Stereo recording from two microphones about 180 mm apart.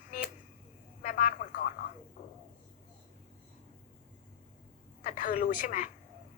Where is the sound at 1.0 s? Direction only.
45° left (ahead or behind).